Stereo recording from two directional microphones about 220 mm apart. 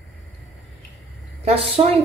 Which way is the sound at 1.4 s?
25° right (ahead or behind).